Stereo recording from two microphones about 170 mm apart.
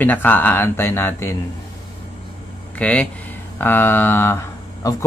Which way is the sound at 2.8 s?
5° left (ahead or behind).